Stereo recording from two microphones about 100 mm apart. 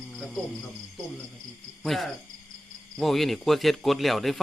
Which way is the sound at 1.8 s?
Centre (ahead or behind).